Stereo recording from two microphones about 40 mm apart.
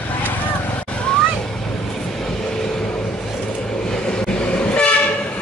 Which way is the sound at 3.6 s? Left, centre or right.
Centre.